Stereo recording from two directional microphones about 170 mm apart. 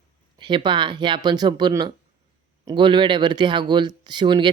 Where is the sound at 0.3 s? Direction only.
25° right (ahead or behind).